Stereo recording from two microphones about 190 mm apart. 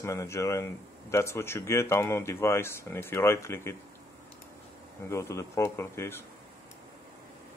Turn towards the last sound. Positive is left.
turn(degrees=15)  # may be behind; listen again after turning